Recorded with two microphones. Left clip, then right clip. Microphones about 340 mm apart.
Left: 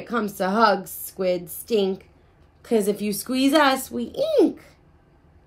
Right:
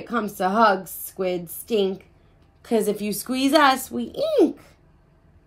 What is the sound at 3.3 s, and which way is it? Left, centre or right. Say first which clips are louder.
Speech: right 1 dB; centre.